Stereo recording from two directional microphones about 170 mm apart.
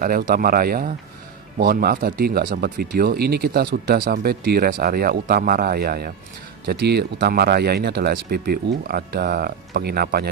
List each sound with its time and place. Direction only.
0.0 s speech: 55° right (ahead or behind)